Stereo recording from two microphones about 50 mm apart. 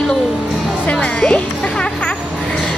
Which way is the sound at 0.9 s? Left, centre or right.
Left.